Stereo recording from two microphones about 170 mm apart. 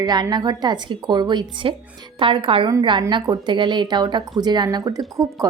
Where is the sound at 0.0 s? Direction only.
25° right (ahead or behind).